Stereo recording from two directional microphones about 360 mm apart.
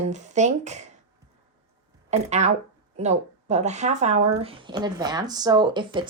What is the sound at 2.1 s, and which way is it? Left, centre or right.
Speech, centre.